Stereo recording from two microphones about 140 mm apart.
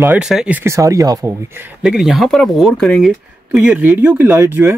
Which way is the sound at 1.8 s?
5° right (ahead or behind).